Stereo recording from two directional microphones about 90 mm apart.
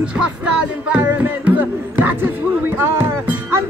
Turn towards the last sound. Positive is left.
turn(degrees=-25)  # may be behind; listen again after turning